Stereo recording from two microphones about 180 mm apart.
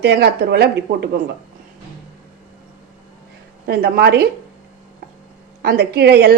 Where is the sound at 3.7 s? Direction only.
60° right (ahead or behind).